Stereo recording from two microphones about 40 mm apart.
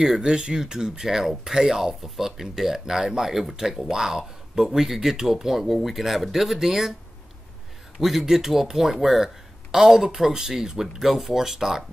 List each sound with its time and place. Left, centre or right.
0.0 s speech: centre
8.0 s speech: centre